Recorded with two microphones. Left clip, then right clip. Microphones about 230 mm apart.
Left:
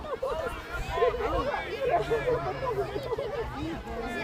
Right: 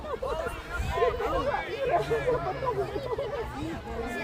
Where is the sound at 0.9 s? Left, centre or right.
Right.